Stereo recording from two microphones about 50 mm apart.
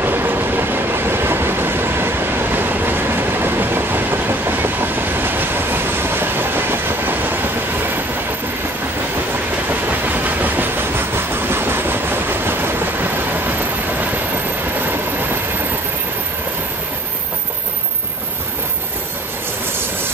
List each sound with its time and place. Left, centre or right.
0.0 s train: right
9.7 s train: right